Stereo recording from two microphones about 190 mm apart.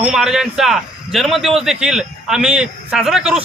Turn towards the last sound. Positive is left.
turn(degrees=-5)  # may be behind; listen again after turning